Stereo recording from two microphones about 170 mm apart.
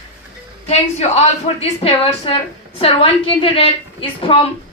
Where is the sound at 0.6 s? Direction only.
40° left (ahead or behind).